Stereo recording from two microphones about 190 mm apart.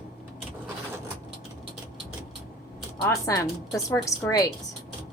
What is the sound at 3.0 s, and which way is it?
A woman's voice, 15° left (ahead or behind).